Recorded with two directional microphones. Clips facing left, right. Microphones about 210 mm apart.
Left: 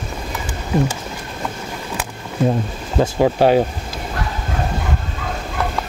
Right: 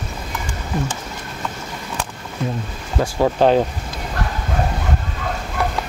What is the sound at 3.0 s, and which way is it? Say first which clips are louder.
Speech: left 4 dB; 25° left (ahead or behind).